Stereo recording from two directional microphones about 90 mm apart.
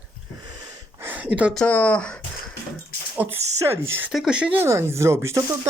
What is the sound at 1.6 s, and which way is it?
Speech, 15° left (ahead or behind).